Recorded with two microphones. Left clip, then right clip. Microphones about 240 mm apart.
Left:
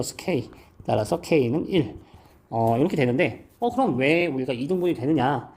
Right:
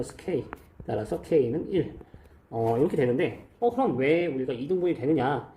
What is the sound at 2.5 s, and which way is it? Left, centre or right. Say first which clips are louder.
Speech: left 3 dB; left.